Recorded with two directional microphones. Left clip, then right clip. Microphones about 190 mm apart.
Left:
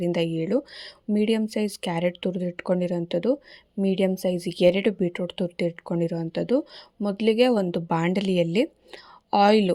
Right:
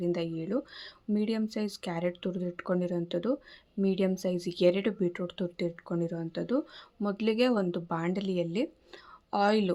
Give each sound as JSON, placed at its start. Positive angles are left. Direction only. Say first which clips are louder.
{"t": 0.0, "sound": "a woman's voice", "louder": "left 7 dB", "side_deg": 40}